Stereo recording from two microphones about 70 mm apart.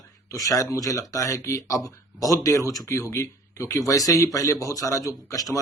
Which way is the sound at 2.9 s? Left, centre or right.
Left.